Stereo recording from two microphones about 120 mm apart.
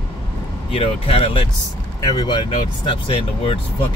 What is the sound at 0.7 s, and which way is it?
Speech, 50° left (ahead or behind).